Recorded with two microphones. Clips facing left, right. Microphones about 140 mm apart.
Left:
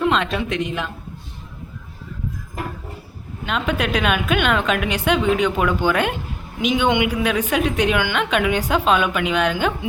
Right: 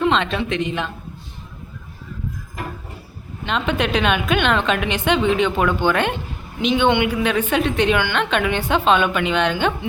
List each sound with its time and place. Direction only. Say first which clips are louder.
0.0 s speech: right 1 dB; 5° left (ahead or behind)
3.4 s a woman's voice: right 1 dB; 5° left (ahead or behind)